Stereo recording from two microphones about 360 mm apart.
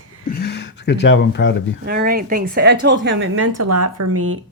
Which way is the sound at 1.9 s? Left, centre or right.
Right.